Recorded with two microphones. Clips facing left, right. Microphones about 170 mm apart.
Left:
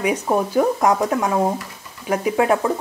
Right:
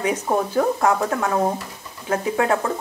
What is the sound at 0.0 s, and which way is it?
Speech, 10° left (ahead or behind).